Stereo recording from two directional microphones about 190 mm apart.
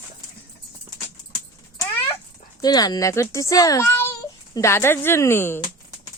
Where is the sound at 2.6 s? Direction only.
20° left (ahead or behind).